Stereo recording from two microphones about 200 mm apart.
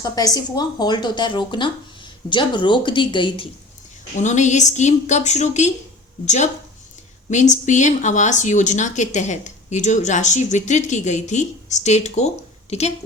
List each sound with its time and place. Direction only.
0.0 s a woman's voice: 20° left (ahead or behind)
4.2 s speech: 35° left (ahead or behind)